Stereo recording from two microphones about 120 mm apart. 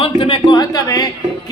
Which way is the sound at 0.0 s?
50° left (ahead or behind).